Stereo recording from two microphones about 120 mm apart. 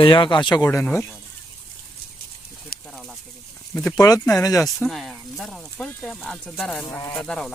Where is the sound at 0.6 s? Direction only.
20° left (ahead or behind).